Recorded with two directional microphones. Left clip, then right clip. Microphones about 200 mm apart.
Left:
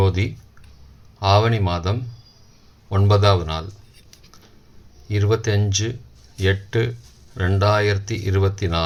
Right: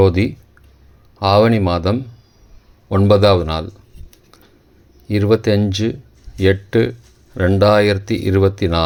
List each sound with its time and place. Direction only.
0.0 s speech: 35° right (ahead or behind)
5.0 s speech: 35° right (ahead or behind)